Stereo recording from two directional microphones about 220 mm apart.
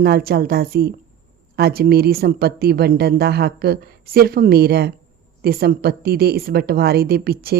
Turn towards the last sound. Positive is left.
turn(degrees=-45)  # may be behind; listen again after turning